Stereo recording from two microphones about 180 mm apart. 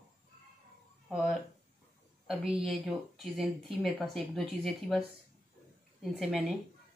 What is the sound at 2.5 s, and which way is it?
Speech, centre (ahead or behind).